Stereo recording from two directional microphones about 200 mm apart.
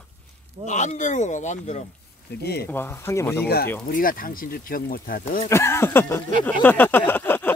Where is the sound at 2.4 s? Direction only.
55° left (ahead or behind).